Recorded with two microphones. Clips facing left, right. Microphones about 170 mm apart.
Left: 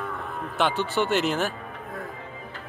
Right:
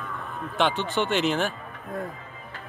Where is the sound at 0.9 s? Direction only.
40° left (ahead or behind).